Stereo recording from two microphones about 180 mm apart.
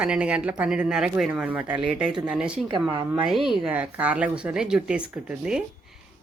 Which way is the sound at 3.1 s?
5° right (ahead or behind).